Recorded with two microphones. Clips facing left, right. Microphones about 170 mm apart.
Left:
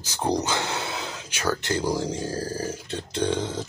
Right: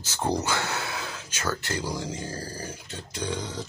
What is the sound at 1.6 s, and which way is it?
Speech, 25° left (ahead or behind).